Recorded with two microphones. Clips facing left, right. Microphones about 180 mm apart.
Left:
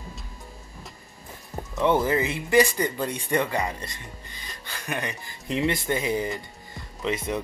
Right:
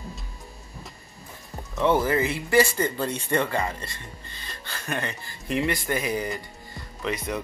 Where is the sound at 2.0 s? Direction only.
20° left (ahead or behind).